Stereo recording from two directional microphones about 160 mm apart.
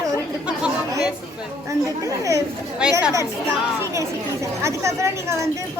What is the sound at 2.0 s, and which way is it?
Speech, 20° right (ahead or behind).